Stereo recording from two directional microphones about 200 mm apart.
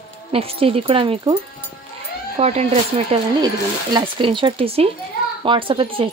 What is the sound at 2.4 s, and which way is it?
Speech, 30° right (ahead or behind).